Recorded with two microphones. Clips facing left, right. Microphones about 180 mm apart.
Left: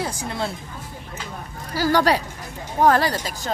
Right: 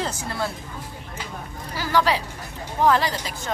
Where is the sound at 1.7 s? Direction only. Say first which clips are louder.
Left 3 dB; 40° left (ahead or behind).